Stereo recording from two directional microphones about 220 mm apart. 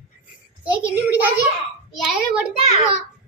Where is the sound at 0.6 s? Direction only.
5° right (ahead or behind).